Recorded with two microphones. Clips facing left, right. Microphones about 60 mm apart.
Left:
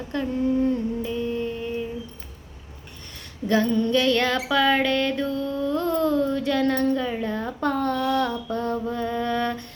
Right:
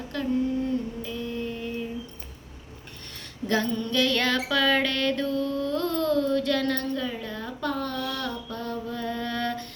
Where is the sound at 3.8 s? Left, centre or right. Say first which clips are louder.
Left 5 dB; left.